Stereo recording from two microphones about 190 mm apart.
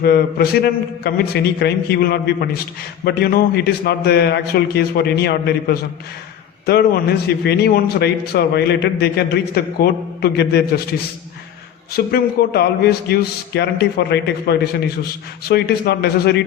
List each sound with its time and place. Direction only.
0.0 s a man's voice: 55° left (ahead or behind)
11.9 s a man's voice: 55° left (ahead or behind)